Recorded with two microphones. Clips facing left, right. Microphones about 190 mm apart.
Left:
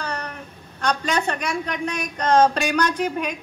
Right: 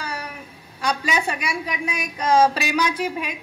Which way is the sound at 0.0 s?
5° right (ahead or behind).